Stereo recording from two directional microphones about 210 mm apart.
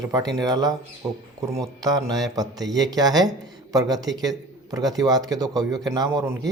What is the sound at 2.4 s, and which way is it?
Speech, 20° right (ahead or behind).